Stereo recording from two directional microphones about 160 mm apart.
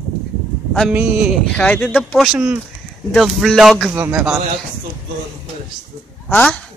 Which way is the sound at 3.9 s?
10° right (ahead or behind).